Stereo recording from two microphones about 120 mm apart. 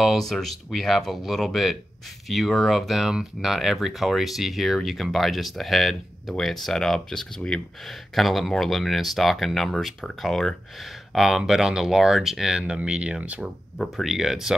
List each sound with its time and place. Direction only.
0.0 s speech: centre (ahead or behind)